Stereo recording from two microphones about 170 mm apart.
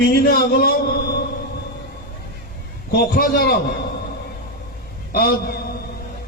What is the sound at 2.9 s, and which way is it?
Speech, 60° left (ahead or behind).